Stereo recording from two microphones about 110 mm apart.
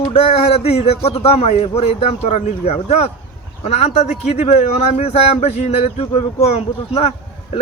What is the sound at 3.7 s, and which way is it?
Speech, 85° left.